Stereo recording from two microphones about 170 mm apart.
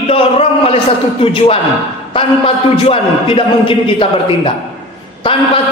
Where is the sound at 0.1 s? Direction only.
35° left (ahead or behind).